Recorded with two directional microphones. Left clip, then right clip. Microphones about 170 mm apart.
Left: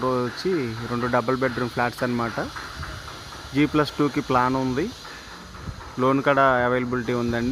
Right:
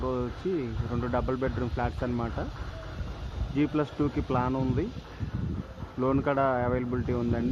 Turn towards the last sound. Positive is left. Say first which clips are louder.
# left 6 dB
turn(degrees=30)  # may be behind; listen again after turning